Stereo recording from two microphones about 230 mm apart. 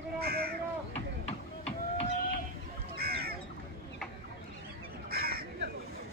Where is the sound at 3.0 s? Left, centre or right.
Right.